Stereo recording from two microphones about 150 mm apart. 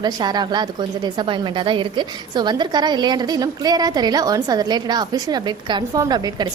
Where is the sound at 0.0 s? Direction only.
30° right (ahead or behind).